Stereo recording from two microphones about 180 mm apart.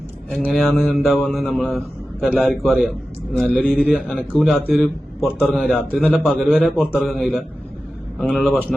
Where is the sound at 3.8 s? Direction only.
5° right (ahead or behind).